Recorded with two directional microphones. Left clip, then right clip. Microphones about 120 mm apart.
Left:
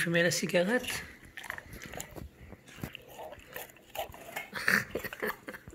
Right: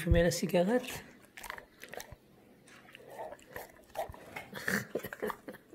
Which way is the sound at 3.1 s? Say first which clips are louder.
Right 2 dB; 20° right (ahead or behind).